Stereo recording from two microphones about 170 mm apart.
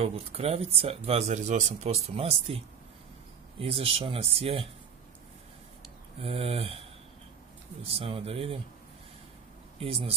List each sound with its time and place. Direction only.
0.0 s speech: 35° right (ahead or behind)
3.6 s speech: 35° right (ahead or behind)
6.1 s speech: 35° right (ahead or behind)
7.8 s speech: 35° right (ahead or behind)
9.8 s speech: 35° right (ahead or behind)